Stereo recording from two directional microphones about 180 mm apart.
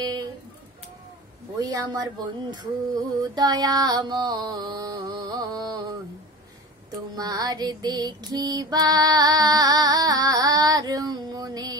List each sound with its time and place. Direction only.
0.0 s a sound: 20° right (ahead or behind)
1.6 s female singing: 20° right (ahead or behind)
7.2 s female singing: 20° right (ahead or behind)